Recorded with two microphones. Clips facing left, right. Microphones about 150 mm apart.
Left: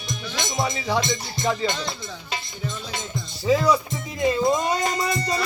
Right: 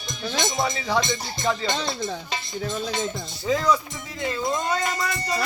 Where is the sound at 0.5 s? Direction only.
10° left (ahead or behind).